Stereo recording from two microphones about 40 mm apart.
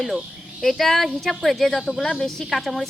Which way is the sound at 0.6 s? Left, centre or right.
Centre.